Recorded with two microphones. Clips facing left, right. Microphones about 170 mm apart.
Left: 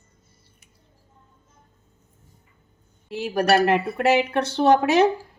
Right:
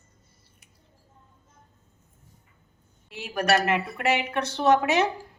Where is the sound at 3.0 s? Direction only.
35° left (ahead or behind).